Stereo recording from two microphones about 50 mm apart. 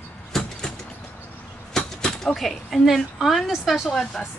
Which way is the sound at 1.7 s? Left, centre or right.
Centre.